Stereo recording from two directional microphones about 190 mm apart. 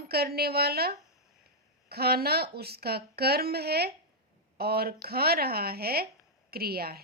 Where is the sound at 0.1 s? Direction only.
55° right (ahead or behind).